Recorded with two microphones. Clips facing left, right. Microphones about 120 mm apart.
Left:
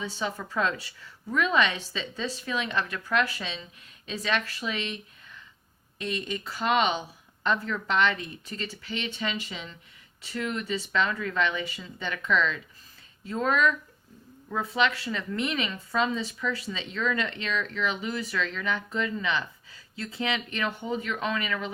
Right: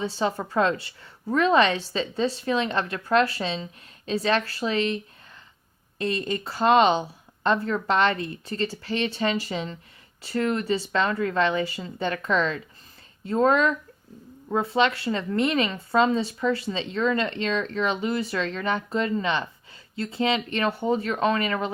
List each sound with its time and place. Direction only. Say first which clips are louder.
0.0 s speech: right 6 dB; 30° right (ahead or behind)